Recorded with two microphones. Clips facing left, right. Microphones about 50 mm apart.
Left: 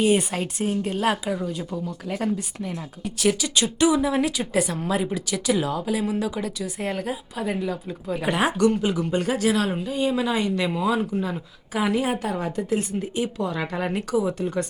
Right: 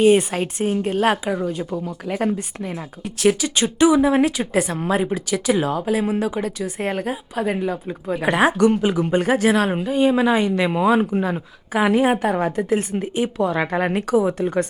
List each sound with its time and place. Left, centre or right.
0.3 s speech: centre
1.2 s speech: centre
3.8 s a woman's voice: centre
4.0 s speech: right
8.1 s a woman's voice: centre
8.4 s speech: centre
8.8 s a woman's voice: centre
9.2 s speech: right
10.4 s a woman's voice: centre
10.7 s speech: right